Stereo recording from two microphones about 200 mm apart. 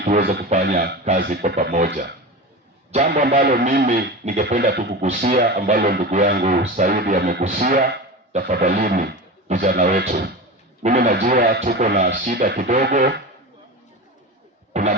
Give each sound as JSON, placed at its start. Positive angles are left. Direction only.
{"t": 0.0, "sound": "music", "side_deg": -50}
{"t": 2.9, "sound": "music", "side_deg": -40}
{"t": 7.4, "sound": "speech", "side_deg": -45}
{"t": 10.8, "sound": "music", "side_deg": -45}
{"t": 14.7, "sound": "a sound", "side_deg": -40}